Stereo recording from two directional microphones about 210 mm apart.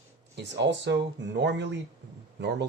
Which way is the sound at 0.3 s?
55° right (ahead or behind).